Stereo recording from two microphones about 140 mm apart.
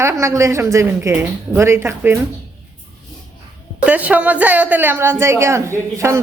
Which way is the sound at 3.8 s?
10° right (ahead or behind).